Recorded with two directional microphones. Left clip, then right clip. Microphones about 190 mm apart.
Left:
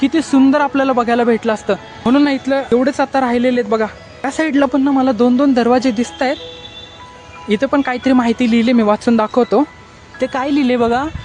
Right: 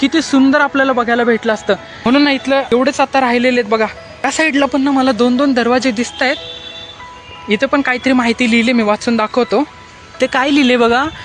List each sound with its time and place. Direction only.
0.0 s speech: 5° left (ahead or behind)
7.4 s speech: 15° left (ahead or behind)
10.2 s speech: centre (ahead or behind)